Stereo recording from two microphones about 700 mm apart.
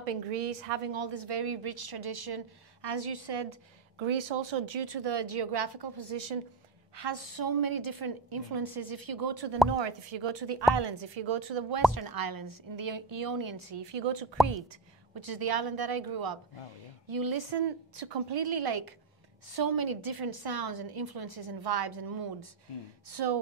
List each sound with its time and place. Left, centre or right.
0.0 s a woman's voice: right
11.9 s a woman's voice: right